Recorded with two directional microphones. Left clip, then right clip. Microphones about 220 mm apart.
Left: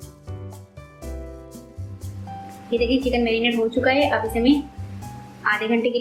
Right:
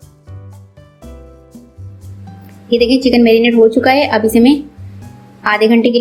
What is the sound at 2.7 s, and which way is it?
A woman's voice, 35° right (ahead or behind).